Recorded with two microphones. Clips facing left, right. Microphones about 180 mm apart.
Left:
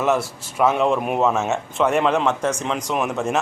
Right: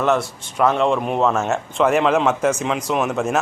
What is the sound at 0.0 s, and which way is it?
Speech, 5° left (ahead or behind).